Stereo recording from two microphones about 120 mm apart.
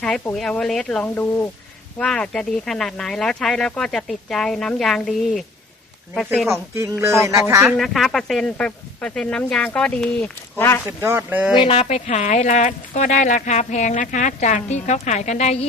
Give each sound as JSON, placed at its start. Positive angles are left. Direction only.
{"t": 0.3, "sound": "speech", "side_deg": 5}
{"t": 1.0, "sound": "speech", "side_deg": 15}
{"t": 2.0, "sound": "speech", "side_deg": 5}
{"t": 6.5, "sound": "speech", "side_deg": -20}
{"t": 7.8, "sound": "speech", "side_deg": 0}
{"t": 10.8, "sound": "speech", "side_deg": -20}
{"t": 11.5, "sound": "speech", "side_deg": 50}